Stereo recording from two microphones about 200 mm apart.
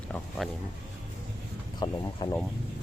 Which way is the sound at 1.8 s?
20° left (ahead or behind).